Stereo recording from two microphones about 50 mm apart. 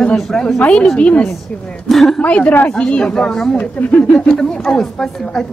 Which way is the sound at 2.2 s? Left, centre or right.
Left.